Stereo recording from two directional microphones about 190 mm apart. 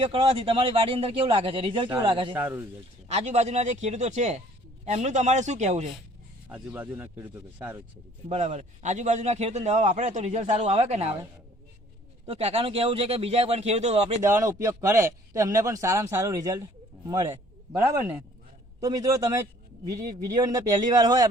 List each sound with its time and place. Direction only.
0.0 s speech: 30° right (ahead or behind)
2.3 s a man's voice: 10° right (ahead or behind)
3.1 s a man's voice: 35° right (ahead or behind)
6.5 s a man's voice: 10° right (ahead or behind)
8.3 s a man's voice: 35° right (ahead or behind)
12.2 s a man's voice: 30° right (ahead or behind)
14.2 s a man's voice: 15° right (ahead or behind)